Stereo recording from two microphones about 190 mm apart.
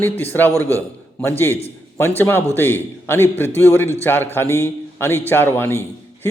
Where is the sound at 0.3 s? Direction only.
10° left (ahead or behind).